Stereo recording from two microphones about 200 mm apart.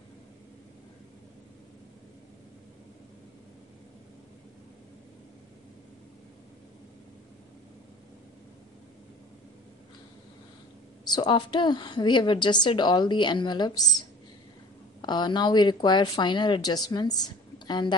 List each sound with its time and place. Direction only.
11.1 s a woman's voice: 20° left (ahead or behind)